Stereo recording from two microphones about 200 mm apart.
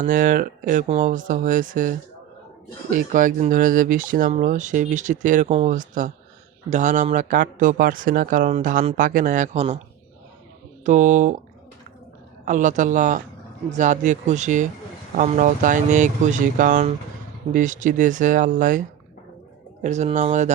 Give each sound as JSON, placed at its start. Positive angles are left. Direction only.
{"t": 0.0, "sound": "speech", "side_deg": -40}
{"t": 10.8, "sound": "speech", "side_deg": -40}
{"t": 12.5, "sound": "speech", "side_deg": -40}